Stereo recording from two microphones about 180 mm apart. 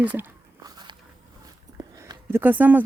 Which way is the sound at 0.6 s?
25° right (ahead or behind).